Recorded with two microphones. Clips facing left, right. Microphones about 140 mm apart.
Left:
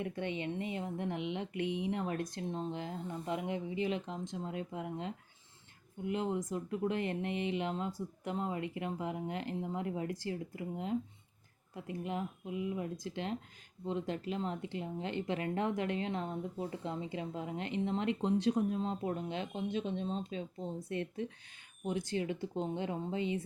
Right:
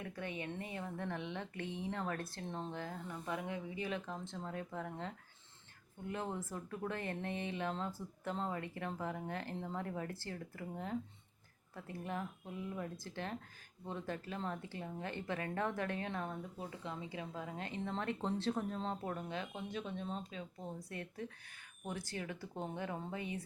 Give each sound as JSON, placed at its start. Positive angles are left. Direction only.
{"t": 0.0, "sound": "speech", "side_deg": 25}